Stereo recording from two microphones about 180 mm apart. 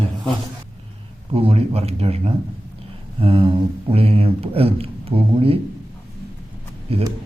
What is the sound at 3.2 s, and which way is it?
Mantra, 30° right (ahead or behind).